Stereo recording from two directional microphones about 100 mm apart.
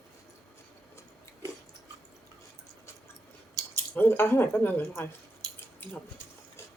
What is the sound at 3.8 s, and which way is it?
Speech, 20° left (ahead or behind).